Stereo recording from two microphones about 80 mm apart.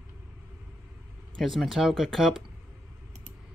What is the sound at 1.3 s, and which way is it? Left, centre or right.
Speech, centre.